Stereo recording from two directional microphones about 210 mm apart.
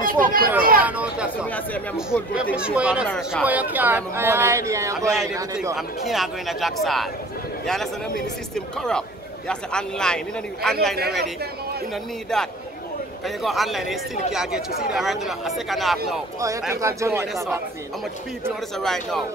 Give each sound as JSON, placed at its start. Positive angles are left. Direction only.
{"t": 0.0, "sound": "a sound", "side_deg": -40}
{"t": 0.8, "sound": "chatter", "side_deg": -5}
{"t": 2.5, "sound": "speech", "side_deg": -5}
{"t": 5.8, "sound": "speech", "side_deg": 0}
{"t": 11.0, "sound": "speech", "side_deg": -50}
{"t": 11.9, "sound": "speech", "side_deg": 0}
{"t": 16.7, "sound": "speech", "side_deg": -15}
{"t": 18.8, "sound": "speech", "side_deg": 0}